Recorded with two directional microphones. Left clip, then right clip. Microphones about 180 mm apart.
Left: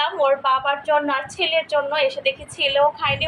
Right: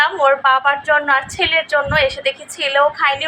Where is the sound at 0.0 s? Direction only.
10° right (ahead or behind).